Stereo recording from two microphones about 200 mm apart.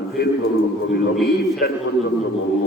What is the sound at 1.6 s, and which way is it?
Speech, 50° left (ahead or behind).